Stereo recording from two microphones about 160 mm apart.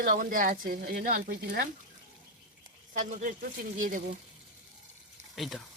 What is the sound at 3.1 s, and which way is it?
A man's voice, 55° right (ahead or behind).